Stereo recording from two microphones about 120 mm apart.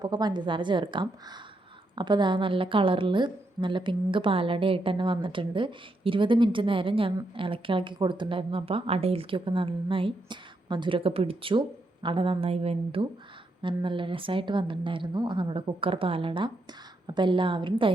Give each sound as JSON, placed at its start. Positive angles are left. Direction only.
{"t": 0.0, "sound": "a woman's voice", "side_deg": -35}
{"t": 13.6, "sound": "a woman's voice", "side_deg": -45}